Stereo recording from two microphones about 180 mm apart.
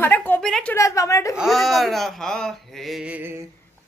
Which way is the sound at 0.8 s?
15° left (ahead or behind).